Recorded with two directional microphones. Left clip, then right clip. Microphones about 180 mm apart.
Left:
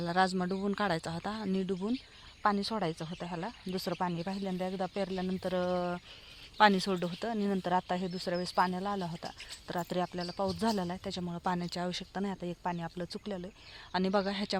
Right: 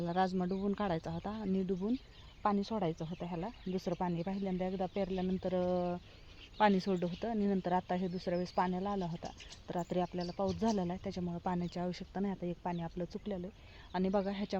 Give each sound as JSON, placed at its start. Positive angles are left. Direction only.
{"t": 0.0, "sound": "speech", "side_deg": 15}